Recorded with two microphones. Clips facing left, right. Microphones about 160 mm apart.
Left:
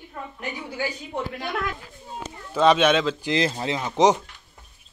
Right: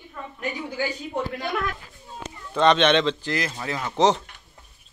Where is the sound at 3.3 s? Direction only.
25° left (ahead or behind).